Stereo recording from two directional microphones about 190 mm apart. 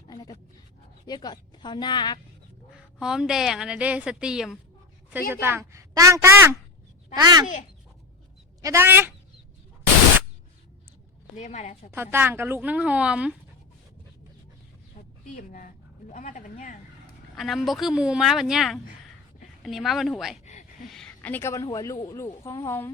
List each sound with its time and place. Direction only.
0.1 s dog: 20° left (ahead or behind)
1.0 s a woman's voice: 20° left (ahead or behind)
2.7 s a woman's voice: 5° right (ahead or behind); by 7.4 s 20° right (ahead or behind)
8.6 s speech: 15° right (ahead or behind)
11.3 s a woman's voice: 35° left (ahead or behind)
11.9 s speech: 10° right (ahead or behind)
14.9 s speech: 45° left (ahead or behind)
17.3 s a woman's voice: centre (ahead or behind)
20.4 s a sound: 40° left (ahead or behind)
20.8 s a woman's voice: centre (ahead or behind)